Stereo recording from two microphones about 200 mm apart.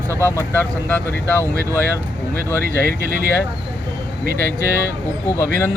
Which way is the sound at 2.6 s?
45° right (ahead or behind).